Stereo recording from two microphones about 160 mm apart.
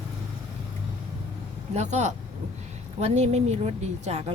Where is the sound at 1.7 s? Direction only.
45° right (ahead or behind).